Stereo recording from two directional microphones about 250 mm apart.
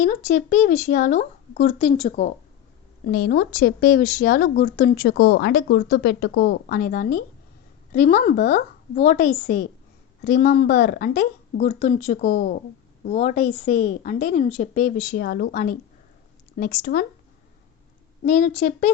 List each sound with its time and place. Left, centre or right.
0.0 s a woman's voice: left
18.3 s a woman's voice: left